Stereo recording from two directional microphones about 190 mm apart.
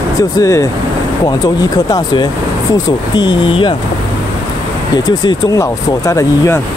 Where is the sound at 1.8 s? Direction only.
20° left (ahead or behind).